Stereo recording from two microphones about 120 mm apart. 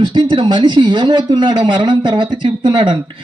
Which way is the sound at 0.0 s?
45° right (ahead or behind).